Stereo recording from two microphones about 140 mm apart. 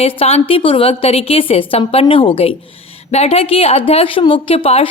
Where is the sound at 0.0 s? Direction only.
45° left (ahead or behind).